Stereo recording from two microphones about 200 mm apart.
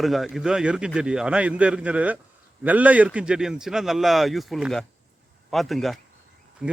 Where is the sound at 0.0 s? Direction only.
Centre (ahead or behind).